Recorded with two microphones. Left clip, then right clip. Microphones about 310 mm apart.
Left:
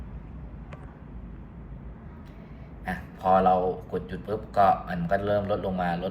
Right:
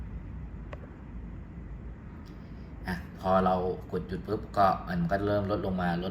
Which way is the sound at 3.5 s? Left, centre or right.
Centre.